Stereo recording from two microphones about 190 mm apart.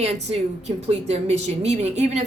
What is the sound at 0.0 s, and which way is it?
A woman's voice, 35° right (ahead or behind).